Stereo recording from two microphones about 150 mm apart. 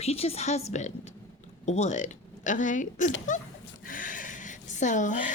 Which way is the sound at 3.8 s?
65° left (ahead or behind).